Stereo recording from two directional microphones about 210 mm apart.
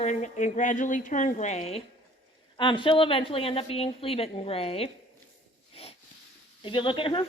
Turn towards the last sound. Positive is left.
turn(degrees=25)  # may be behind; listen again after turning